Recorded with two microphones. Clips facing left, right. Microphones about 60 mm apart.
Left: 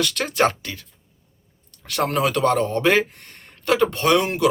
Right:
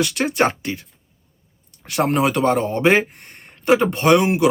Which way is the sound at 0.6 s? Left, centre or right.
Right.